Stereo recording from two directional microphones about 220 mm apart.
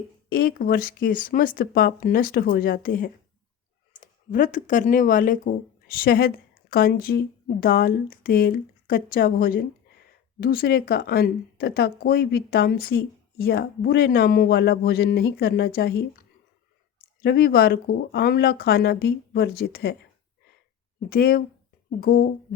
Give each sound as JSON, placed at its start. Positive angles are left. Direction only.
{"t": 0.3, "sound": "a woman's voice", "side_deg": 40}
{"t": 17.2, "sound": "speech", "side_deg": 45}
{"t": 21.1, "sound": "speech", "side_deg": 40}